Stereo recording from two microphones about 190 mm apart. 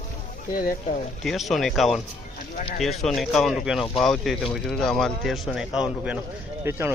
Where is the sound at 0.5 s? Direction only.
50° left (ahead or behind).